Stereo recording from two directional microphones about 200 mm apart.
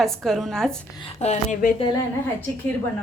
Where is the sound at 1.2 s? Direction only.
35° left (ahead or behind).